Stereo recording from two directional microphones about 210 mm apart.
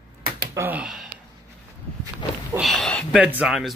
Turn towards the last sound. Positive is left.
turn(degrees=0)  # may be behind; listen again after turning